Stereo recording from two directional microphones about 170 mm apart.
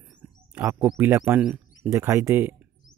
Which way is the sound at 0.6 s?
5° right (ahead or behind).